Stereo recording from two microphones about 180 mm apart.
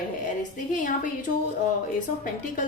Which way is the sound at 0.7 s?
45° left (ahead or behind).